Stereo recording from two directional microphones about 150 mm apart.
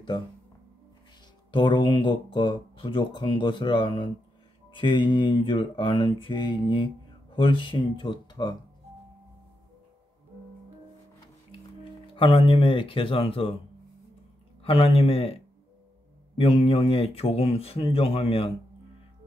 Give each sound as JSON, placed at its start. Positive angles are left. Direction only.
{"t": 1.5, "sound": "speech", "side_deg": 35}
{"t": 12.1, "sound": "speech", "side_deg": 35}
{"t": 14.6, "sound": "speech", "side_deg": 40}